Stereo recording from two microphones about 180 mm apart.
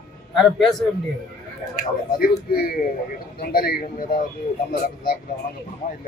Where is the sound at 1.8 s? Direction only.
55° left (ahead or behind).